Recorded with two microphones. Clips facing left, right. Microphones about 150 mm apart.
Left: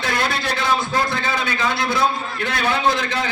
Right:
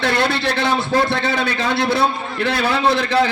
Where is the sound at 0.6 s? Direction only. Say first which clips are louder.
Right 2 dB; 30° right (ahead or behind).